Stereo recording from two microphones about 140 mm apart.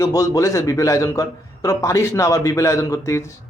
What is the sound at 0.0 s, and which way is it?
Speech, 25° left (ahead or behind).